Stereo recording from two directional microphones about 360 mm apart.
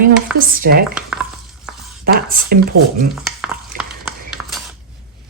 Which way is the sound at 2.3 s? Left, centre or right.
Right.